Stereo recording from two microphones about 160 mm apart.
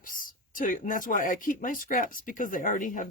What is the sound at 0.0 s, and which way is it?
Speech, 60° left (ahead or behind).